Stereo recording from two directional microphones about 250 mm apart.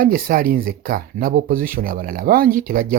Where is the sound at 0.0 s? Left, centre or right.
Right.